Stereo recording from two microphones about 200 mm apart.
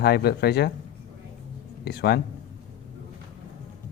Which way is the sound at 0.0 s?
55° left (ahead or behind).